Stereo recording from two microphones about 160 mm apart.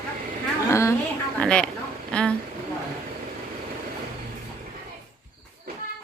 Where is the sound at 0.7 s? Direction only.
20° left (ahead or behind).